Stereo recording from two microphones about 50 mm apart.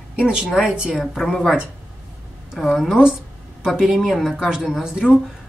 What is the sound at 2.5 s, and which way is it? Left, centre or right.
A woman's voice, centre.